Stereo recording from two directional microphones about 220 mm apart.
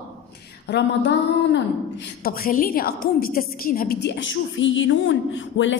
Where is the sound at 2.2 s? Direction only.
40° left (ahead or behind).